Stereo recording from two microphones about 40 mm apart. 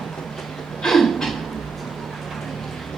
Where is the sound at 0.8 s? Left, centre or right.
Centre.